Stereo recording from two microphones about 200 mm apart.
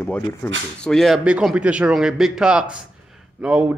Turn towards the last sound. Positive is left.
turn(degrees=-10)  # may be behind; listen again after turning